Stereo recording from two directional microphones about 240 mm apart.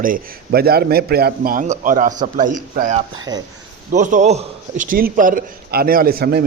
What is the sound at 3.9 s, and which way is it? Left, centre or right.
A man's voice, right.